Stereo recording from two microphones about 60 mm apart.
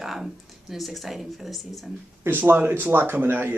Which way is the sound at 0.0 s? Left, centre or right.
Centre.